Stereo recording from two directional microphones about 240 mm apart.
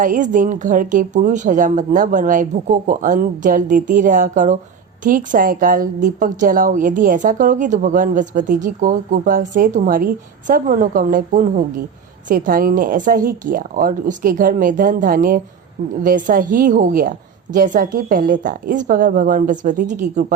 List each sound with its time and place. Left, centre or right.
0.0 s a woman's voice: right